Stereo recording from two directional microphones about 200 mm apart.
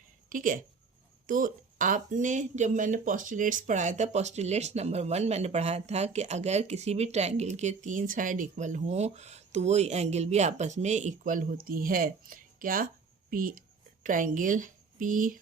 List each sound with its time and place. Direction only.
0.3 s a woman's voice: 40° right (ahead or behind)